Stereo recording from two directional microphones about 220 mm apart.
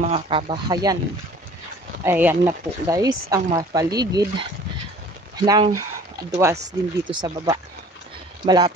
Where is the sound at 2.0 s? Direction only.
10° right (ahead or behind).